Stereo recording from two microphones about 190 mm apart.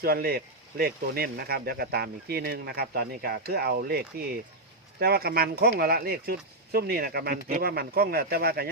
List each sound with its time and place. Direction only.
0.0 s speech: 55° right (ahead or behind)